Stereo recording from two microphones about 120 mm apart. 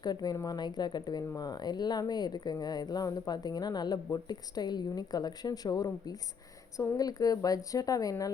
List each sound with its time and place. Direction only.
0.0 s speech: 35° left (ahead or behind)